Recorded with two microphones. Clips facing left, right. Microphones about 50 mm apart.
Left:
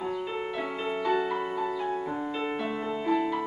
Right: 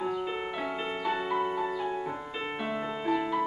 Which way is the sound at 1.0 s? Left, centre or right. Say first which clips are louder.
Left 1 dB; centre.